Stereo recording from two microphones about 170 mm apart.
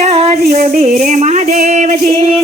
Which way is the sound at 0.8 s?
45° right (ahead or behind).